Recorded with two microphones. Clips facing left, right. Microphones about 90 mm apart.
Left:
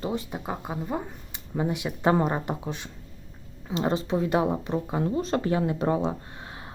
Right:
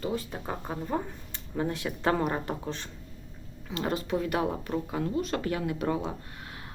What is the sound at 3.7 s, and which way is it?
Speech, 25° left (ahead or behind).